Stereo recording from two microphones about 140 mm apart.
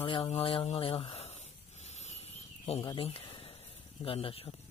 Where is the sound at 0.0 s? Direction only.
40° left (ahead or behind).